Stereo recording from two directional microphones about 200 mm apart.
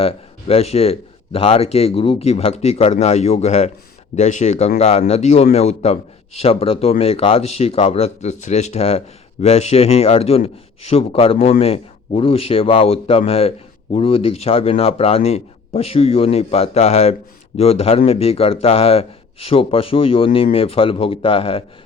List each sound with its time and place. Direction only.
0.0 s a man's voice: 30° left (ahead or behind)